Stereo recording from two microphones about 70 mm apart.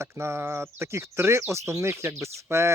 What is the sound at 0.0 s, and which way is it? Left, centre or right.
Speech, right.